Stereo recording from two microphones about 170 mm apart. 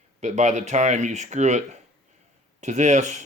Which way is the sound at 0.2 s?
45° right (ahead or behind).